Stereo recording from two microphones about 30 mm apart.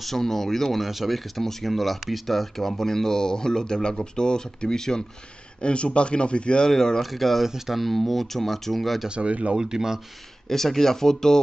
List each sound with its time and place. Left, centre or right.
0.0 s speech: centre
0.7 s speech: centre; by 5.0 s left
5.6 s speech: left
6.7 s speech: centre
7.0 s speech: centre
7.4 s speech: centre
8.1 s speech: centre
9.1 s speech: right
9.6 s speech: centre
10.5 s speech: centre